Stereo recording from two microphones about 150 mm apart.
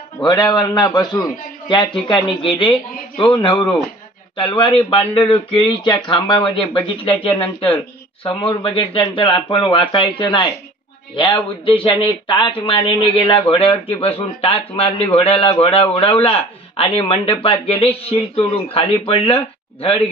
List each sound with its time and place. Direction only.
0.2 s speech: 30° left (ahead or behind)